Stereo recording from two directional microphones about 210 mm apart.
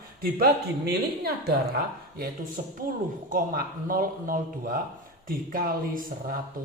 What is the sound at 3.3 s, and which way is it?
A woman's voice, 40° right (ahead or behind).